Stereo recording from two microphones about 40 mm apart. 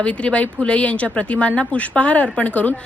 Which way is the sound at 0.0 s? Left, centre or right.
Left.